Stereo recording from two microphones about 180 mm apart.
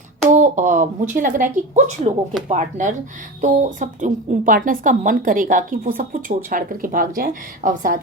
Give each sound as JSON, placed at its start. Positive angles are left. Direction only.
{"t": 0.3, "sound": "speech", "side_deg": -45}